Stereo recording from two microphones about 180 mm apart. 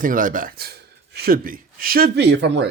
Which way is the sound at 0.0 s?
50° right (ahead or behind).